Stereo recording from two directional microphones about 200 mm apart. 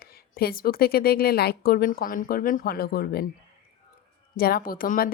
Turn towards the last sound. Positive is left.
turn(degrees=45)  # may be behind; listen again after turning